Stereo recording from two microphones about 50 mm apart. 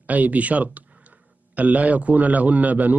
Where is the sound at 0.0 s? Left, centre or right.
Right.